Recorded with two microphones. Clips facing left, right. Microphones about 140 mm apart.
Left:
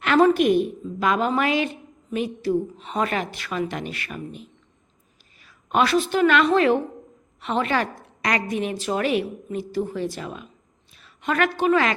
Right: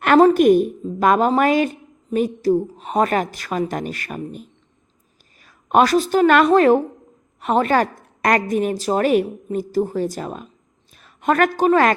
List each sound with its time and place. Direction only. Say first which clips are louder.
0.0 s a woman's voice: right 5 dB; 45° right (ahead or behind)